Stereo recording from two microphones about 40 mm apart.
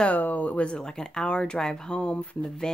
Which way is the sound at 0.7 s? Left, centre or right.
Centre.